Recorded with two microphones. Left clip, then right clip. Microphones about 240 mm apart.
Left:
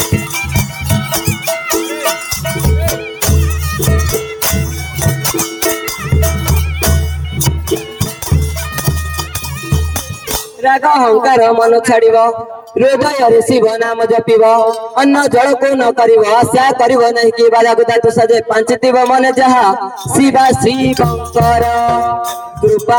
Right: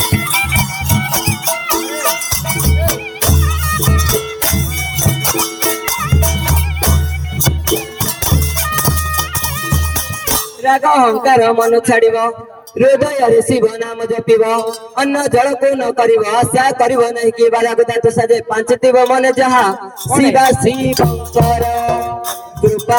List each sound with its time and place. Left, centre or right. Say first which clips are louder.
10.6 s a man's voice: left 1 dB; left